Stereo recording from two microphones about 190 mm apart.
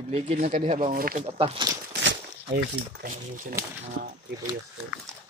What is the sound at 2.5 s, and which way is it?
Speech, 50° right (ahead or behind).